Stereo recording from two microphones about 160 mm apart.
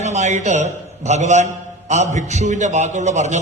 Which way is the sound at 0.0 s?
45° right (ahead or behind).